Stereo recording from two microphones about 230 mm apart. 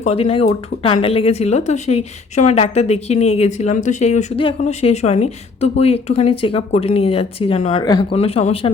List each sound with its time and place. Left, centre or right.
0.0 s speech: left